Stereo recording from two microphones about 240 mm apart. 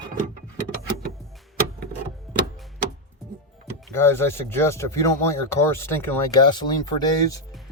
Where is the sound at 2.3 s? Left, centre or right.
Centre.